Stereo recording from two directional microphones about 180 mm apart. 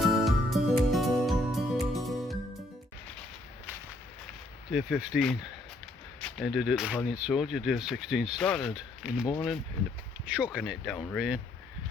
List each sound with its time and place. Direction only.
0.0 s music: centre (ahead or behind)
4.7 s speech: centre (ahead or behind)
10.2 s speech: 5° right (ahead or behind)